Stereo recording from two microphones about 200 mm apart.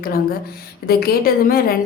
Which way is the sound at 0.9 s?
50° left (ahead or behind).